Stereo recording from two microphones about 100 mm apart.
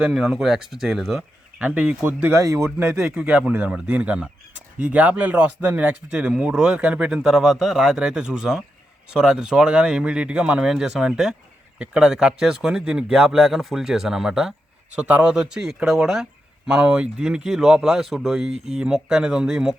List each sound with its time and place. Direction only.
0.0 s speech: centre (ahead or behind)
2.3 s a man's voice: 30° right (ahead or behind)
3.2 s speech: 10° right (ahead or behind)
18.5 s speech: 90° right
18.8 s speech: 5° right (ahead or behind)